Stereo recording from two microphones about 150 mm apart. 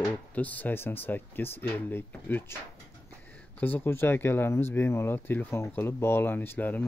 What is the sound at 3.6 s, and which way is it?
Speech, 15° left (ahead or behind).